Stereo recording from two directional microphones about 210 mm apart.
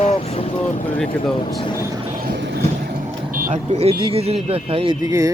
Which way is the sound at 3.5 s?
30° right (ahead or behind).